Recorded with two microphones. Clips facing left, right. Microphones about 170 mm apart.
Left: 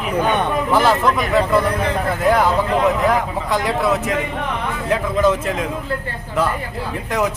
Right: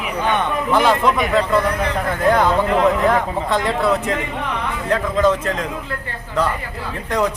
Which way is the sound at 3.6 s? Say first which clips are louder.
Even; 5° left (ahead or behind).